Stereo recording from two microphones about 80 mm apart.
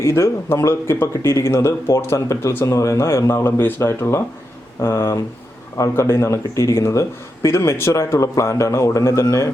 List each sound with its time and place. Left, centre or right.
0.0 s a man's voice: left